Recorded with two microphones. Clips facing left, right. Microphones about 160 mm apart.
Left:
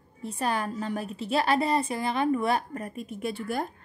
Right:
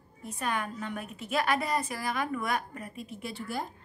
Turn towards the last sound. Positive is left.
turn(degrees=50)  # may be behind; listen again after turning